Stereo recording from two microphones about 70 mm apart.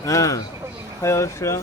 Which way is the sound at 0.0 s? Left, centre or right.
Left.